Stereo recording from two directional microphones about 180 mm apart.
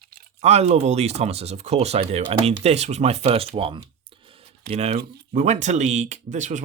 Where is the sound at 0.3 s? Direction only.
35° right (ahead or behind).